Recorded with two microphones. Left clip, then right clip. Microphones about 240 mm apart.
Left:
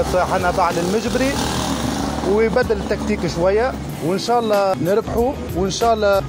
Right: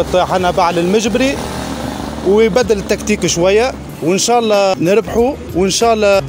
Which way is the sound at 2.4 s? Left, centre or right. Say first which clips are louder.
Right 5 dB; right.